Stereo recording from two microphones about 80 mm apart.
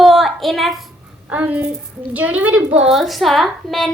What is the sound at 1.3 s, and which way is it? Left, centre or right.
A child's voice, centre.